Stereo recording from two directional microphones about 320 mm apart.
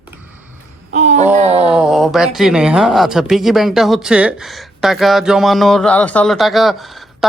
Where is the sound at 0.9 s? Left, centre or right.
Right.